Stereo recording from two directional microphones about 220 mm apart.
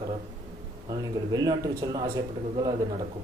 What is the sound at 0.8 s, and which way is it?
Speech, 20° right (ahead or behind).